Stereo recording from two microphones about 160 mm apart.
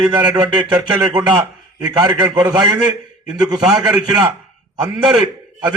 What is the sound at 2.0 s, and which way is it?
Speech, 30° right (ahead or behind).